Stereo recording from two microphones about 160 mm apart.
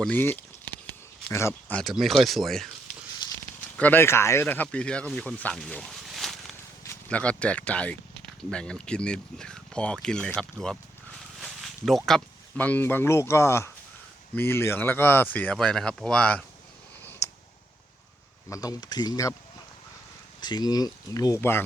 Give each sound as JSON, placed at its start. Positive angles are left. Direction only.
{"t": 0.0, "sound": "speech", "side_deg": 10}
{"t": 3.8, "sound": "speech", "side_deg": 10}
{"t": 17.0, "sound": "a sound", "side_deg": 10}
{"t": 18.4, "sound": "speech", "side_deg": 20}
{"t": 20.4, "sound": "speech", "side_deg": 25}